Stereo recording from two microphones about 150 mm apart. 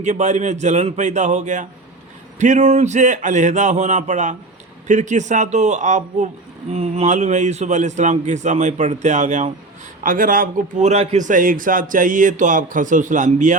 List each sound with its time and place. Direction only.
0.0 s a man's voice: 50° right (ahead or behind)
10.0 s a man's voice: 65° right (ahead or behind)